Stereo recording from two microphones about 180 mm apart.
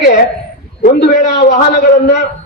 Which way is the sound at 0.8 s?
50° left (ahead or behind).